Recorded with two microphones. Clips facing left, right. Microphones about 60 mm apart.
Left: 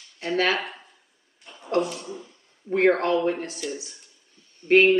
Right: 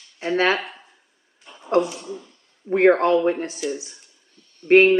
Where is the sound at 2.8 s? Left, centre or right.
Right.